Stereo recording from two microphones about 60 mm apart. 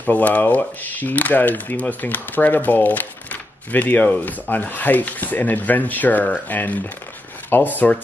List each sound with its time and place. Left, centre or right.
0.0 s speech: left